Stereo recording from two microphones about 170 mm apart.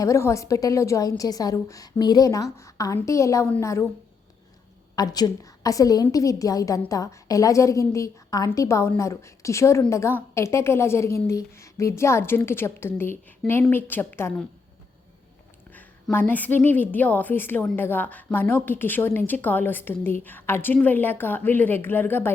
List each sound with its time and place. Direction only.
0.0 s a woman's voice: 15° left (ahead or behind)
4.9 s a woman's voice: 20° left (ahead or behind)
15.7 s a woman's voice: 10° left (ahead or behind)